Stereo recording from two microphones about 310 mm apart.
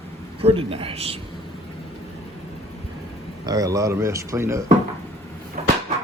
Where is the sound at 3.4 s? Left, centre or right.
Centre.